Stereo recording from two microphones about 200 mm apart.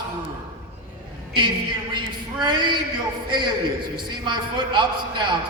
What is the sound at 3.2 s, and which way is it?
A man's voice, 20° right (ahead or behind).